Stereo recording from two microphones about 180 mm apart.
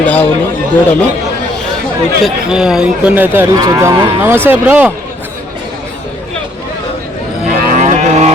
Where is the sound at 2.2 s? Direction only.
5° right (ahead or behind).